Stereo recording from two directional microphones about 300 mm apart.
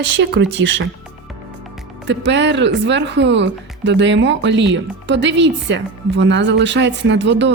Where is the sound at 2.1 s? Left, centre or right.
Right.